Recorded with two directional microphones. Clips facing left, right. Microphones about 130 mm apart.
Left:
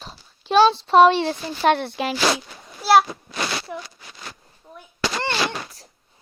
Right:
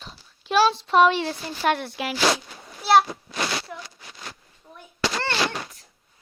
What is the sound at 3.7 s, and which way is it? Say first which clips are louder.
Speech: left 5 dB; 5° left (ahead or behind).